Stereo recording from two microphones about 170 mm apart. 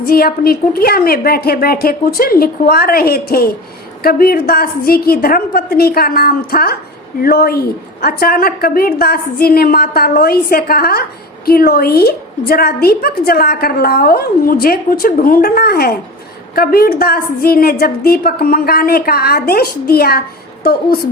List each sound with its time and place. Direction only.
0.0 s a woman's voice: 65° left (ahead or behind)